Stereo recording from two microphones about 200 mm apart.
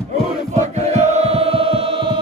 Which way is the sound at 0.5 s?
35° right (ahead or behind).